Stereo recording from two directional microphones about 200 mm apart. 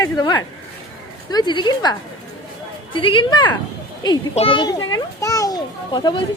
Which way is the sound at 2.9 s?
25° left (ahead or behind).